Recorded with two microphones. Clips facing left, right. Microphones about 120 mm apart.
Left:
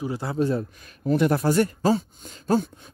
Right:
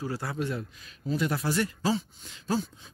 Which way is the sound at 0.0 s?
20° left (ahead or behind).